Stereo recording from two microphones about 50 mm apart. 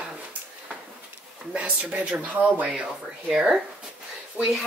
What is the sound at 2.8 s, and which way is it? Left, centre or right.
Speech, centre.